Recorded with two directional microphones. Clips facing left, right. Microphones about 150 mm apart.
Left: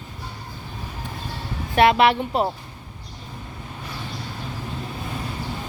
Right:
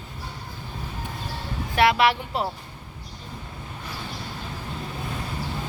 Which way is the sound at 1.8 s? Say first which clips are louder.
Left 4 dB; 20° left (ahead or behind).